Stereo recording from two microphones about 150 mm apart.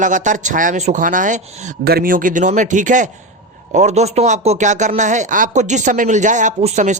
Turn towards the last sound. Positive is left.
turn(degrees=-50)  # may be behind; listen again after turning